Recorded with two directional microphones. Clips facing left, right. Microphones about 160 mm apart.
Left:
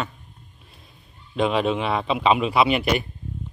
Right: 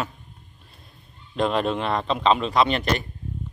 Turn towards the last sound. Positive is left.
turn(degrees=10)  # may be behind; listen again after turning